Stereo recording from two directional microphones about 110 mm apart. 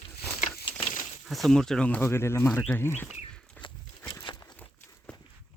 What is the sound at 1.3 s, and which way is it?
Speech, centre (ahead or behind).